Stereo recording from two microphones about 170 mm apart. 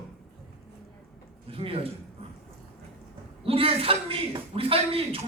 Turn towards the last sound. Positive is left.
turn(degrees=-35)  # may be behind; listen again after turning